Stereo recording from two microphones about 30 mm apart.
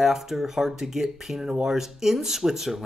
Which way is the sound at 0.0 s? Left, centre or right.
Centre.